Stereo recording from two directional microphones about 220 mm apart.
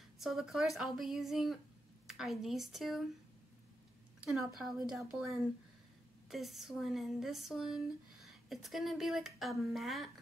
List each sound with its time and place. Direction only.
0.2 s speech: centre (ahead or behind)
4.2 s a woman's voice: centre (ahead or behind)